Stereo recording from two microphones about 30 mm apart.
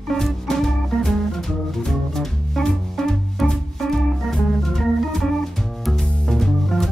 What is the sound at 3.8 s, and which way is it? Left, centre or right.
Organ, centre.